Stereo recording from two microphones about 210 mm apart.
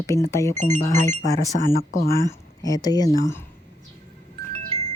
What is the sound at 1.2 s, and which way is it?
Speech, 40° left (ahead or behind).